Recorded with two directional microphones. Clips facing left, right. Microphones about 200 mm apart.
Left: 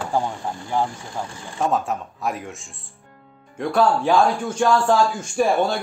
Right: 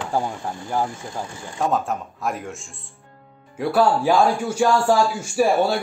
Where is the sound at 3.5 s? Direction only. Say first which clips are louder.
Right 1 dB; 5° right (ahead or behind).